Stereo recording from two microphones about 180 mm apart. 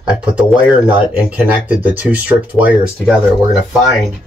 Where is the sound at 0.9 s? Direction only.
10° right (ahead or behind).